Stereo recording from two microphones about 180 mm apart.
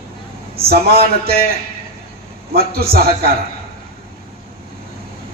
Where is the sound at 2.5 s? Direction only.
60° right (ahead or behind).